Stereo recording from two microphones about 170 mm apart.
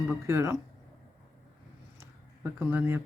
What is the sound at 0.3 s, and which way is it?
Speech, 15° right (ahead or behind).